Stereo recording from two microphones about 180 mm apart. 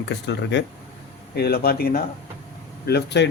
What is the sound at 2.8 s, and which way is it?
Speech, 65° left (ahead or behind).